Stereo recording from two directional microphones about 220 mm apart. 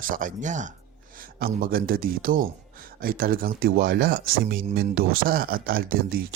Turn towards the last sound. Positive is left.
turn(degrees=-40)  # may be behind; listen again after turning